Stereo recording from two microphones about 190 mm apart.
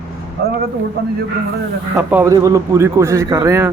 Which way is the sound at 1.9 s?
10° right (ahead or behind).